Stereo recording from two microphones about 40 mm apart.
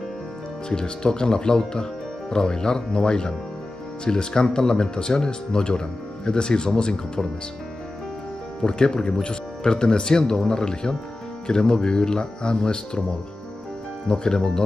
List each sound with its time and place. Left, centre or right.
0.7 s speech: centre
8.6 s speech: centre
14.0 s speech: centre